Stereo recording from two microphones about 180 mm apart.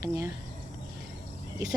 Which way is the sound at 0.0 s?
15° right (ahead or behind).